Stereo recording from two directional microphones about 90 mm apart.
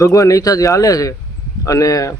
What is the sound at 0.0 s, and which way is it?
Speech, 40° left (ahead or behind).